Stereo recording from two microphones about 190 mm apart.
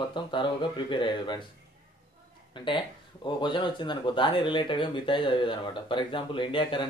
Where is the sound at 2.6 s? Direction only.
25° left (ahead or behind).